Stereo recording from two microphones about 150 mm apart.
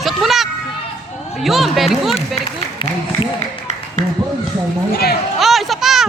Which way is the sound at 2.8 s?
35° left (ahead or behind).